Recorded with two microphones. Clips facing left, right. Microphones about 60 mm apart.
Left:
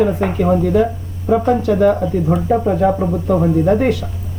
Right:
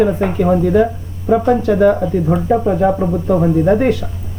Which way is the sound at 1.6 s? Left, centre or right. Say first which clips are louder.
Right 1 dB; centre.